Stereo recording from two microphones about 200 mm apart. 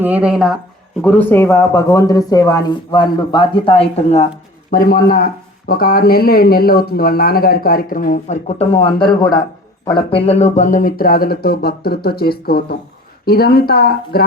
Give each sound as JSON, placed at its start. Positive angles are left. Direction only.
{"t": 0.0, "sound": "speech", "side_deg": -5}
{"t": 1.0, "sound": "speech", "side_deg": 10}
{"t": 4.7, "sound": "speech", "side_deg": 45}